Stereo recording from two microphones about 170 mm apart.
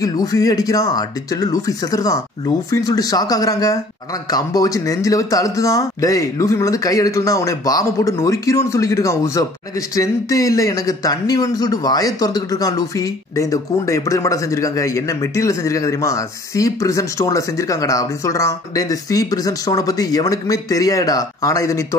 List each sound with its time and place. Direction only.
0.0 s speech: 20° left (ahead or behind)